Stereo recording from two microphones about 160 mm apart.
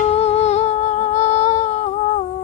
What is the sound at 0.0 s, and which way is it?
Humming, 40° left (ahead or behind).